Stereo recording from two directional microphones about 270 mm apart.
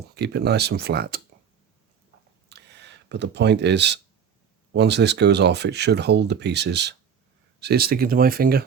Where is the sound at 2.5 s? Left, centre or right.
Right.